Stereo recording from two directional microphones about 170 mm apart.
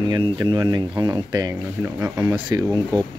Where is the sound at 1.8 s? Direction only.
10° right (ahead or behind).